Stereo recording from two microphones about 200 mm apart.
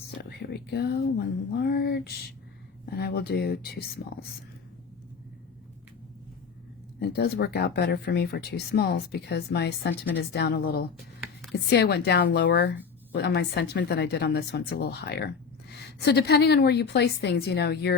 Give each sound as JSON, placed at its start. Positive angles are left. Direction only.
{"t": 0.2, "sound": "speech", "side_deg": 55}
{"t": 1.5, "sound": "a sound", "side_deg": 55}
{"t": 2.9, "sound": "speech", "side_deg": 55}
{"t": 7.0, "sound": "a woman's voice", "side_deg": 55}